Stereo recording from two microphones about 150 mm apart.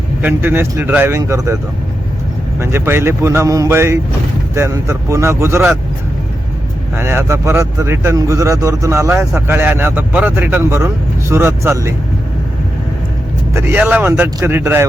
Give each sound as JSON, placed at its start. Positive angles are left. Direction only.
{"t": 0.2, "sound": "speech", "side_deg": -10}
{"t": 2.6, "sound": "speech", "side_deg": -15}
{"t": 6.9, "sound": "speech", "side_deg": -15}
{"t": 13.5, "sound": "speech", "side_deg": -15}